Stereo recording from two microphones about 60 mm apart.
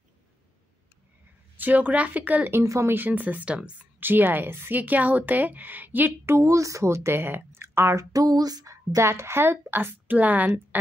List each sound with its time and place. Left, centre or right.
1.6 s a woman's voice: right
2.6 s speech: right
2.9 s a woman's voice: right
4.0 s speech: right
4.7 s a woman's voice: right
6.2 s speech: right
10.1 s a woman's voice: right